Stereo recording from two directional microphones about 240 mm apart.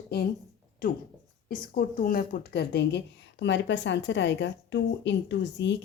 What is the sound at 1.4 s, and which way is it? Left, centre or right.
A woman's voice, left.